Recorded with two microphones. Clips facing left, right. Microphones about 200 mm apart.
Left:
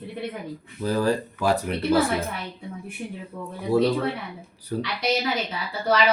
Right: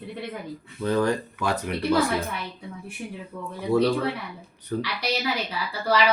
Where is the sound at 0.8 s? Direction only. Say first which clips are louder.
Even; 35° left (ahead or behind).